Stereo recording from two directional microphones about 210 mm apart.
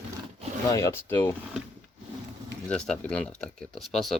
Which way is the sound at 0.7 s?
15° left (ahead or behind).